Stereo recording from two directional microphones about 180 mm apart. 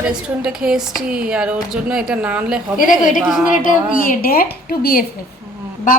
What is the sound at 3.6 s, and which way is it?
A woman's voice, 50° left (ahead or behind).